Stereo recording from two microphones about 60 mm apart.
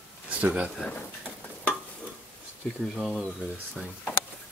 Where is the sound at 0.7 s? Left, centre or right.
Centre.